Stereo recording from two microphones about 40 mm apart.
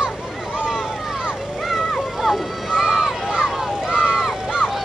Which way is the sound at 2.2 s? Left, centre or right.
Centre.